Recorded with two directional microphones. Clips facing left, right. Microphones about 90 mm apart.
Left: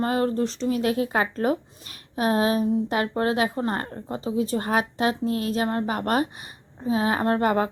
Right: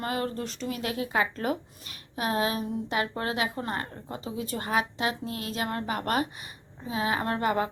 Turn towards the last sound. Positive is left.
turn(degrees=45)  # may be behind; listen again after turning